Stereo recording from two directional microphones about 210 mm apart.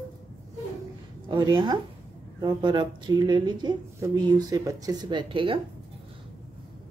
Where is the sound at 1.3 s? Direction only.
20° right (ahead or behind).